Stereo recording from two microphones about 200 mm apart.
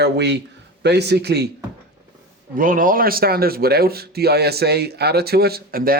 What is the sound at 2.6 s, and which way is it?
Speech, 40° right (ahead or behind).